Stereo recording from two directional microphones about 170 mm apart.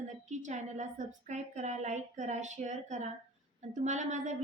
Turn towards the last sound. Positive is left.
turn(degrees=-45)  # may be behind; listen again after turning